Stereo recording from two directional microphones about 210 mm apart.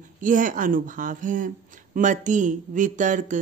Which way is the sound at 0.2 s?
40° right (ahead or behind).